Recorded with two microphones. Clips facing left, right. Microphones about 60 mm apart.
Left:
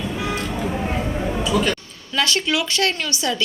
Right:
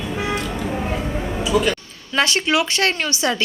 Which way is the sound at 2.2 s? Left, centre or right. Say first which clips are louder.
Right 3 dB; right.